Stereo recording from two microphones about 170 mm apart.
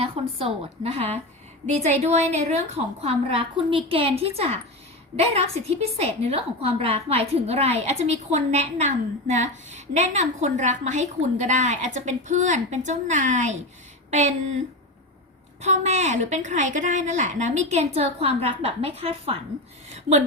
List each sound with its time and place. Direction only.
0.0 s a woman's voice: 35° right (ahead or behind)
15.6 s a woman's voice: 45° right (ahead or behind)